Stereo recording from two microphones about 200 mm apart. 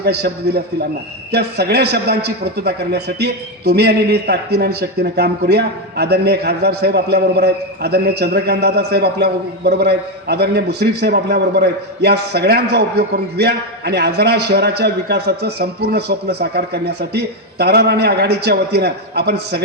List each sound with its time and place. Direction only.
0.0 s a man's voice: 55° right (ahead or behind)